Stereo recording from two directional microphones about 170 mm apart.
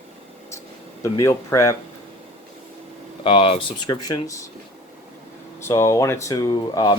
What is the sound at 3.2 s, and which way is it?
Speech, 30° left (ahead or behind).